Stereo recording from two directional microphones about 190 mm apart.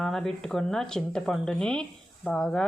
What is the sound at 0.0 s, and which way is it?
Speech, centre (ahead or behind).